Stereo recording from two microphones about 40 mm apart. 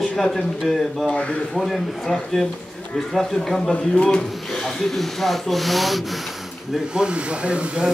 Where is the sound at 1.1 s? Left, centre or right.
Left.